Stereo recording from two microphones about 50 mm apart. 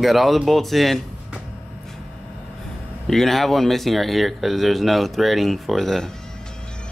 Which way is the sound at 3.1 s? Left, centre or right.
Centre.